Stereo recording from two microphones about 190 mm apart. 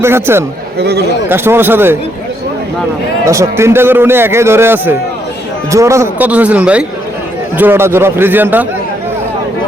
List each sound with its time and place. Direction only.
0.0 s a man's voice: 15° right (ahead or behind)
0.8 s a man's voice: 60° right (ahead or behind)
1.3 s a man's voice: 10° right (ahead or behind)
3.2 s a man's voice: 15° right (ahead or behind)